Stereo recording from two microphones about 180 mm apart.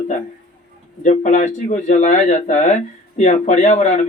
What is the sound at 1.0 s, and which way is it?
Speech, 40° left (ahead or behind).